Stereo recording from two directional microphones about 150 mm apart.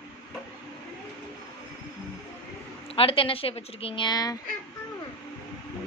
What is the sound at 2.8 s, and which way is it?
A woman's voice, 40° left (ahead or behind).